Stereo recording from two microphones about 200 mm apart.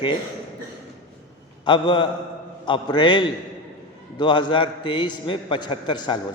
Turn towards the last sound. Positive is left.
turn(degrees=20)  # may be behind; listen again after turning